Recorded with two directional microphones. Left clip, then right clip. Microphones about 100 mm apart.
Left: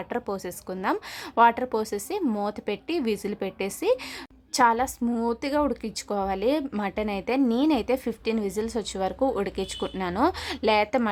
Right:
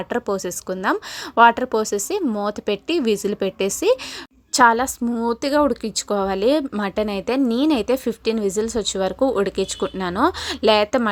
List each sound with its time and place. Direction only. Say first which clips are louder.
0.1 s speech: right 8 dB; 35° right (ahead or behind)